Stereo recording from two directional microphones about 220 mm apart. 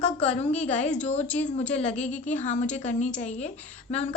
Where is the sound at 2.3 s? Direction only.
35° left (ahead or behind).